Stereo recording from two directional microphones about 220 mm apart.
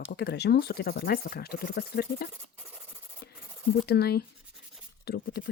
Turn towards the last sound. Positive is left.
turn(degrees=45)  # may be behind; listen again after turning